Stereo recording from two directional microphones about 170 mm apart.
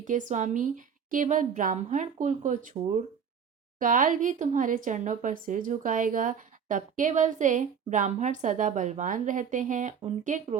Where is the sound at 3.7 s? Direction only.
50° right (ahead or behind).